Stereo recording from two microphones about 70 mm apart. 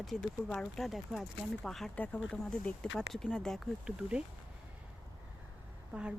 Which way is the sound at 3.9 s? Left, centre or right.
Centre.